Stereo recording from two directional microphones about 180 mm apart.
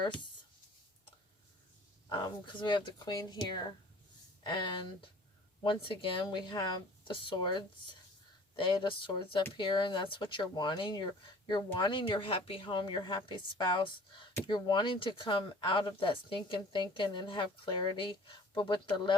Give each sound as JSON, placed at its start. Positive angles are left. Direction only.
{"t": 2.0, "sound": "speech", "side_deg": 25}